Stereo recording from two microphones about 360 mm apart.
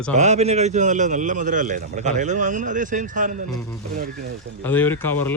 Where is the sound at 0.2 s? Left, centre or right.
Centre.